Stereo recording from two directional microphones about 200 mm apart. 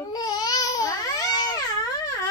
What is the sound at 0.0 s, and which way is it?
Babbling, 20° left (ahead or behind).